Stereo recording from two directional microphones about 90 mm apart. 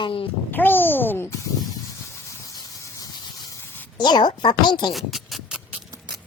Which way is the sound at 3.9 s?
55° left (ahead or behind).